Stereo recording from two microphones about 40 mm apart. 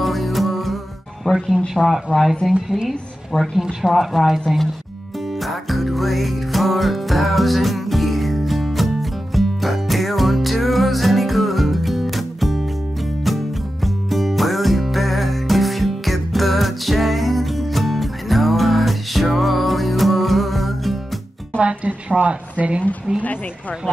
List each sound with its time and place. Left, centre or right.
0.0 s music: centre
1.3 s speech: left
1.9 s a woman's voice: centre
3.3 s a woman's voice: centre
5.4 s music: centre
21.5 s a sound: right